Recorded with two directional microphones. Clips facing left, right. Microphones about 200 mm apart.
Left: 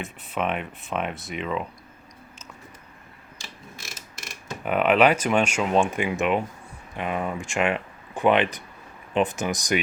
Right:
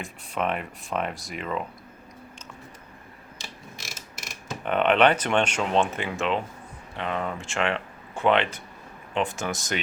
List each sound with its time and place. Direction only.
0.0 s speech: centre (ahead or behind)
4.6 s speech: 5° left (ahead or behind)